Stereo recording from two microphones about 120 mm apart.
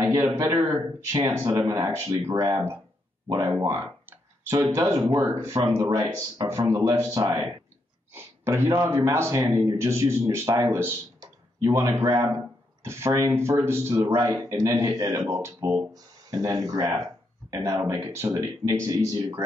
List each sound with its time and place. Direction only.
0.0 s a sound: 25° right (ahead or behind)
0.4 s speech: 25° right (ahead or behind)
1.4 s speech: 35° right (ahead or behind)
1.9 s speech: 25° right (ahead or behind)
3.6 s speech: 25° right (ahead or behind)